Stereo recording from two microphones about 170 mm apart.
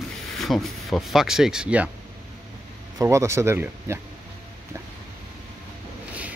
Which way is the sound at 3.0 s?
15° right (ahead or behind).